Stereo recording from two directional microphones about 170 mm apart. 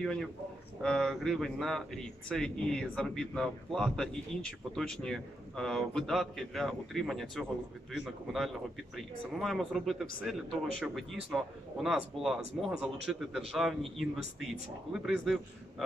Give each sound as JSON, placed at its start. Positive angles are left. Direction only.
{"t": 0.8, "sound": "speech", "side_deg": 5}